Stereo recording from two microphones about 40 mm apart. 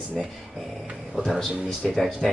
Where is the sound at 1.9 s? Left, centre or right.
Centre.